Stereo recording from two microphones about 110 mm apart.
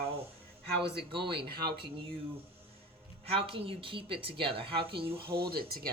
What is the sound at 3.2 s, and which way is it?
A woman's voice, 60° right (ahead or behind).